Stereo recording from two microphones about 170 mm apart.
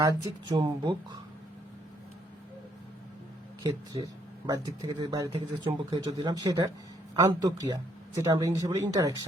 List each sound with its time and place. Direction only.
0.0 s speech: 20° right (ahead or behind)
3.6 s speech: 20° right (ahead or behind)